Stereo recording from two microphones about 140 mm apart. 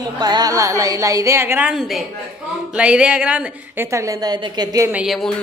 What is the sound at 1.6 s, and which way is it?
A woman's voice, centre (ahead or behind).